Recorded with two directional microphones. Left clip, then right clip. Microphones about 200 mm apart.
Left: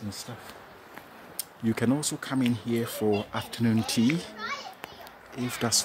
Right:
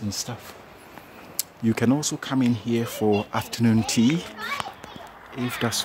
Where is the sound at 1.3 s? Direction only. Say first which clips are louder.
Right 5 dB; 10° right (ahead or behind).